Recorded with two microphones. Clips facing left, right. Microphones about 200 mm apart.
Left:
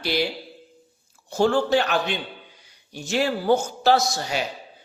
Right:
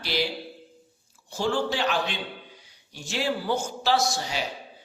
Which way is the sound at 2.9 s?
45° left (ahead or behind).